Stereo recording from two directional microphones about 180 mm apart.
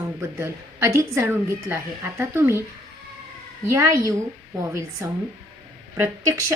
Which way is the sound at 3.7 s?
15° right (ahead or behind).